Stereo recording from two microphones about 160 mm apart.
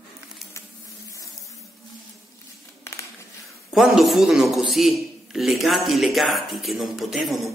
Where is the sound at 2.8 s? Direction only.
15° left (ahead or behind).